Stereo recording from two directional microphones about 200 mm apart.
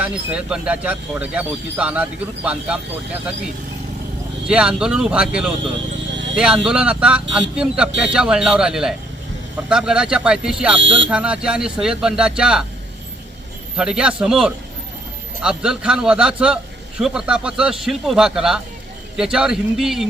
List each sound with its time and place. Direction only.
0.0 s speech: 5° right (ahead or behind)
4.4 s speech: 5° right (ahead or behind)
10.8 s speech: 65° right (ahead or behind)
11.1 s speech: 5° right (ahead or behind)
13.7 s speech: 5° right (ahead or behind)